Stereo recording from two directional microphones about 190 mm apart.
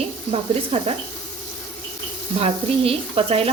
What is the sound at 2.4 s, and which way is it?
Speech, 30° right (ahead or behind).